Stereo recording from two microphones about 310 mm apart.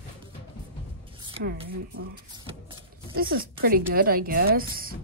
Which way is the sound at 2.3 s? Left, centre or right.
Centre.